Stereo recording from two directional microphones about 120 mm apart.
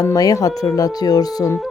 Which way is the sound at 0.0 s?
30° left (ahead or behind).